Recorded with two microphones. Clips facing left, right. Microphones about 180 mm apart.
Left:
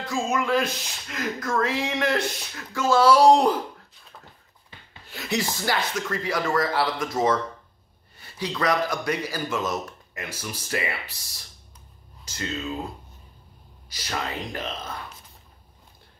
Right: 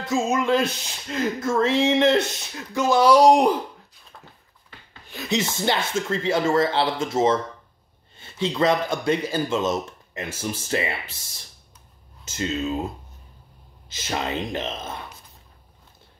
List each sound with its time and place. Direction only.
0.0 s speech: 25° right (ahead or behind)
5.1 s speech: 20° right (ahead or behind)
12.3 s a sound: 25° right (ahead or behind)
13.8 s speech: 25° right (ahead or behind)